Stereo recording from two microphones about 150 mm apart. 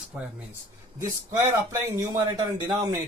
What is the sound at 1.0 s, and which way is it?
Speech, 20° right (ahead or behind).